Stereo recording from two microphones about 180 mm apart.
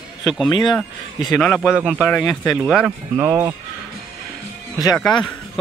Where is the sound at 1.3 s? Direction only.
10° left (ahead or behind).